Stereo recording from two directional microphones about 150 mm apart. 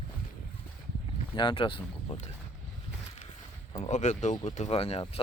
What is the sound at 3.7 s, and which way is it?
Speech, 50° left (ahead or behind).